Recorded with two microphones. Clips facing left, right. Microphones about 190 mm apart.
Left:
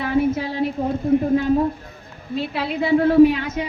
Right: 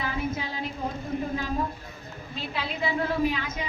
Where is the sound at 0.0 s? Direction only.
65° left (ahead or behind).